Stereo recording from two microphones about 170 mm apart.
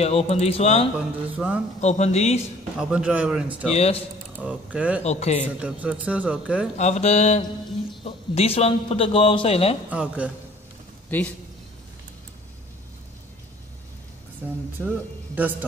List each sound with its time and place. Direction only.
0.0 s a man's voice: 40° left (ahead or behind)
0.9 s a man's voice: 10° right (ahead or behind)
1.8 s a man's voice: 40° left (ahead or behind)
2.8 s a man's voice: 5° right (ahead or behind)
3.7 s a man's voice: 40° left (ahead or behind)
4.4 s a man's voice: 5° right (ahead or behind)
5.0 s a man's voice: 40° left (ahead or behind)
5.6 s a man's voice: 5° right (ahead or behind)
6.8 s a man's voice: 40° left (ahead or behind)
9.8 s a man's voice: 5° right (ahead or behind)
11.1 s a man's voice: 10° left (ahead or behind)
14.4 s speech: 10° right (ahead or behind)